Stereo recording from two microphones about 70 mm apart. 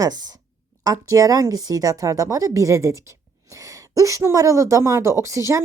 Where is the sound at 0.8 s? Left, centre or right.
Right.